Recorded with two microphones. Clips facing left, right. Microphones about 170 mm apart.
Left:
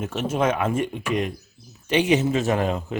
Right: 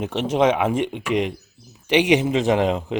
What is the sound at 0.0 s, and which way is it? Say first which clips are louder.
A man's voice: right 4 dB; 15° right (ahead or behind).